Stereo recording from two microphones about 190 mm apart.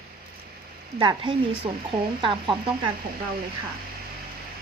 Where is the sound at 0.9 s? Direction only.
25° right (ahead or behind).